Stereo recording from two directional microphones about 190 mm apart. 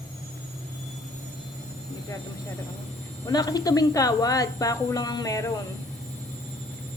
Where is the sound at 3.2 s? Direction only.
20° left (ahead or behind).